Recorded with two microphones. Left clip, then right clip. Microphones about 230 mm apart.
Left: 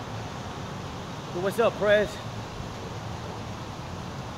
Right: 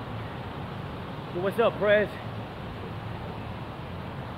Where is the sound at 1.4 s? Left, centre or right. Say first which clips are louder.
Left 1 dB; centre.